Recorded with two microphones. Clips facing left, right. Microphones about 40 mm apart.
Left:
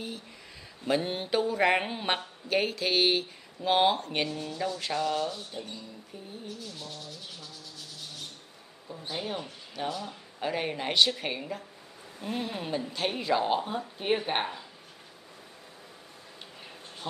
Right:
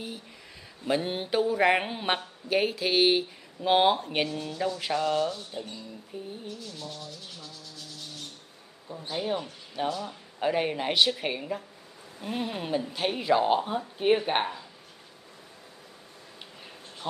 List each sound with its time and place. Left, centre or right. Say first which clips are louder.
0.8 s speech: right 1 dB; centre
6.1 s a sound: right 7 dB; centre
8.9 s speech: right 4 dB; centre